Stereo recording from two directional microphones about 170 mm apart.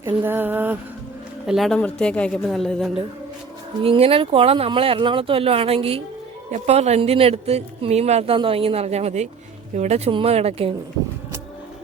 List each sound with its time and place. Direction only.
0.0 s a sound: 10° right (ahead or behind)
1.5 s speech: centre (ahead or behind)
3.8 s speech: 35° right (ahead or behind)